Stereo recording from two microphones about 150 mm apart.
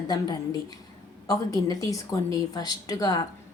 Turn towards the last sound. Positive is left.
turn(degrees=25)  # may be behind; listen again after turning